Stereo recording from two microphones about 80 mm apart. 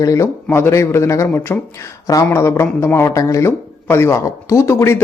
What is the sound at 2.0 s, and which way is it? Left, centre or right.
Speech, left.